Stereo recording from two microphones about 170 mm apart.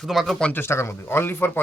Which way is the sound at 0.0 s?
Centre (ahead or behind).